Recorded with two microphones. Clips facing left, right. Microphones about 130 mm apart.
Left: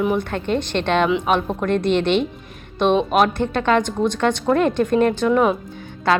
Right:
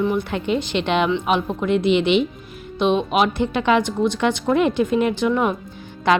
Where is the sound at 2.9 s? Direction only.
45° left (ahead or behind).